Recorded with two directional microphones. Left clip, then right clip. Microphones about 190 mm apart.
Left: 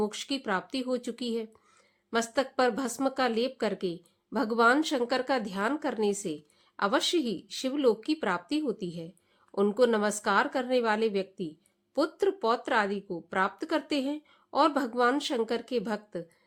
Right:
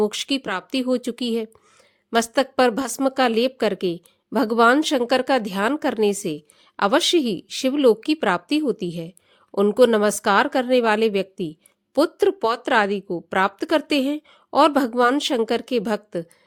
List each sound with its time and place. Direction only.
0.0 s a woman's voice: 45° right (ahead or behind)